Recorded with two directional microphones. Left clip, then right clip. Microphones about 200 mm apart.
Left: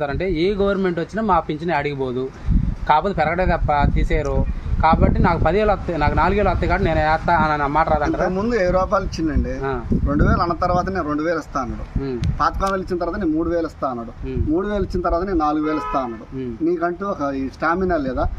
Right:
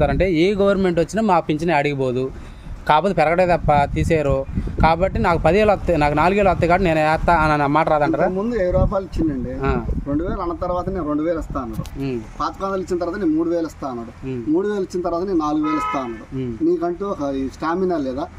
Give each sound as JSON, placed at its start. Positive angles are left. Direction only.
{"t": 0.0, "sound": "speech", "side_deg": -55}
{"t": 8.4, "sound": "speech", "side_deg": 5}
{"t": 10.1, "sound": "speech", "side_deg": 5}
{"t": 12.9, "sound": "speech", "side_deg": 5}